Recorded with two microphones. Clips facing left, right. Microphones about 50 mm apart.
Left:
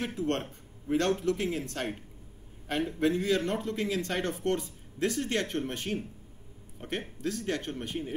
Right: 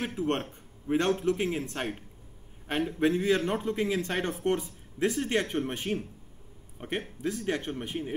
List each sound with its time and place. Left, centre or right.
0.0 s speech: right
3.0 s a man's voice: right